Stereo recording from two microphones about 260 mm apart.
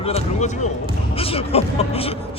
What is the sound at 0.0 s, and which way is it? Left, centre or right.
A man's voice, left.